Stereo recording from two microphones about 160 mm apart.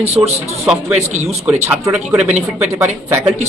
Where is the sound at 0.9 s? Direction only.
45° right (ahead or behind).